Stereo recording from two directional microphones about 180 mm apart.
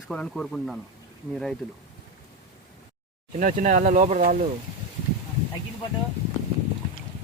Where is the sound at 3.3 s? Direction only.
45° right (ahead or behind).